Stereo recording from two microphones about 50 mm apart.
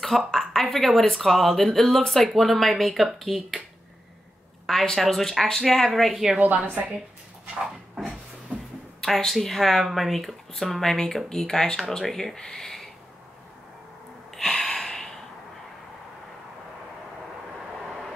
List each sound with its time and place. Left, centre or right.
0.3 s a sound: centre
0.7 s speech: centre
4.6 s speech: centre
6.4 s a woman's voice: right
9.0 s speech: centre
14.3 s gasp: centre